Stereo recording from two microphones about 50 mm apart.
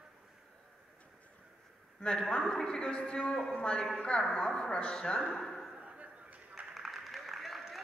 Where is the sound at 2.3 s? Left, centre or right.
Centre.